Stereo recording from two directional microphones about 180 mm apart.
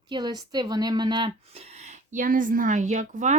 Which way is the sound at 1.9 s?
45° right (ahead or behind).